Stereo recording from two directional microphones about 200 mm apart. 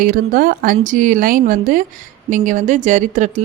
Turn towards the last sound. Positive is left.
turn(degrees=-40)  # may be behind; listen again after turning